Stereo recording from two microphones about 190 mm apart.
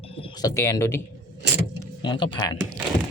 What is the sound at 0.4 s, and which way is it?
Speech, 15° left (ahead or behind).